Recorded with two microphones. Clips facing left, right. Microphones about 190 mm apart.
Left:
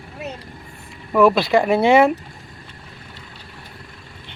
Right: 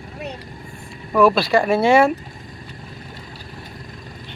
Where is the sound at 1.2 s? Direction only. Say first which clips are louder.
Left 1 dB; 20° left (ahead or behind).